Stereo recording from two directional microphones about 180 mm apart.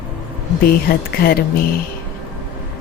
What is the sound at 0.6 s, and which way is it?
Speech, 60° left (ahead or behind).